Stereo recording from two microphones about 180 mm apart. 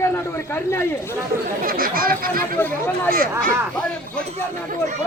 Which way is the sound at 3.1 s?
55° right (ahead or behind).